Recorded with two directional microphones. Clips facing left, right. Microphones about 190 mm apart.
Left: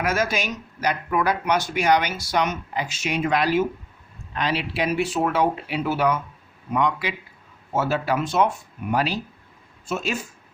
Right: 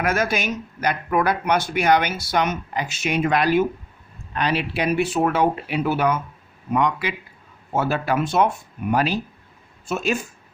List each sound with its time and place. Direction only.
0.0 s speech: 55° right (ahead or behind)